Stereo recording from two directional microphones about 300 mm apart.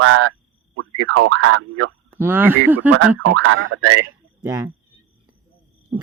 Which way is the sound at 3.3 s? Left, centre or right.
Right.